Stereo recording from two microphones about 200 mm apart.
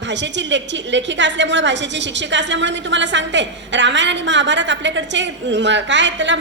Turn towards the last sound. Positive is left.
turn(degrees=-65)  # may be behind; listen again after turning